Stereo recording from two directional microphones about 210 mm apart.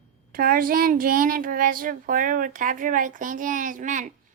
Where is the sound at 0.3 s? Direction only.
45° right (ahead or behind).